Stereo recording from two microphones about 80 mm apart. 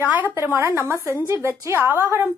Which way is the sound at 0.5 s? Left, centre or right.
Right.